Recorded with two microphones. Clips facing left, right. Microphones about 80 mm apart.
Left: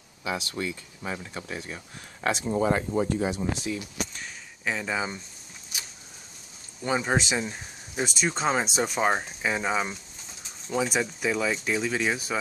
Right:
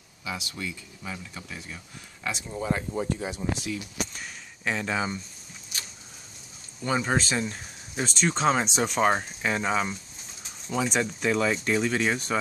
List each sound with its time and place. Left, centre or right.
0.2 s speech: left
2.2 s speech: left
4.1 s a sound: centre
6.8 s speech: centre